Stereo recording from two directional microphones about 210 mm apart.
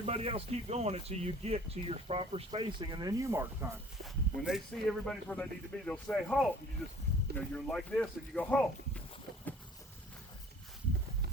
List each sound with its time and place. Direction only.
0.0 s speech: 25° right (ahead or behind)
4.4 s speech: centre (ahead or behind)